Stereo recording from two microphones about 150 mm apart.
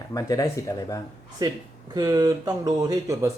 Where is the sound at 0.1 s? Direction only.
25° left (ahead or behind).